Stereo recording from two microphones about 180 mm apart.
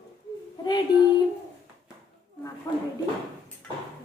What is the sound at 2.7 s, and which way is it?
Speech, 15° left (ahead or behind).